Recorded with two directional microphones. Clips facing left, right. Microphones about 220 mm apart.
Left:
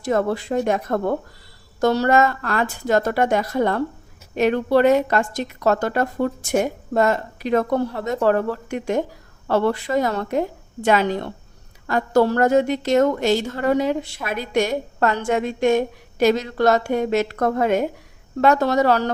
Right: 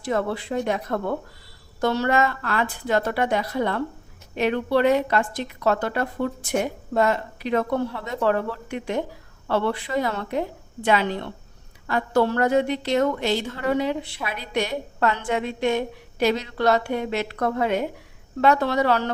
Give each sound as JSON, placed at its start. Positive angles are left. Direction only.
{"t": 0.0, "sound": "a woman's voice", "side_deg": 45}